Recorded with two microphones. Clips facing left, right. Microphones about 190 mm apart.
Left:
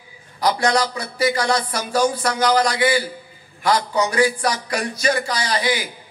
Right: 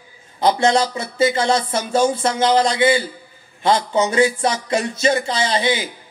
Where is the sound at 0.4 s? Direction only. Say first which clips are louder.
Right 3 dB; 25° right (ahead or behind).